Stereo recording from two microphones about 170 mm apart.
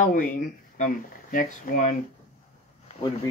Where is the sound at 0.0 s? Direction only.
50° left (ahead or behind).